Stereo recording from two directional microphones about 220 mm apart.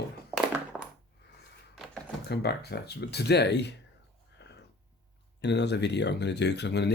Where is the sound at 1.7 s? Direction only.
Centre (ahead or behind).